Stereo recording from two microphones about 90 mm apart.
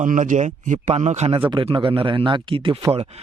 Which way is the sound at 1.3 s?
80° right.